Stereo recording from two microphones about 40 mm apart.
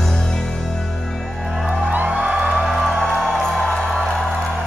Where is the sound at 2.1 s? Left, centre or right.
Right.